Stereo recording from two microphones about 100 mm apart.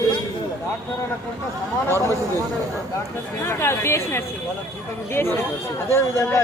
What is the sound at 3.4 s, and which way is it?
Speech, 25° left (ahead or behind).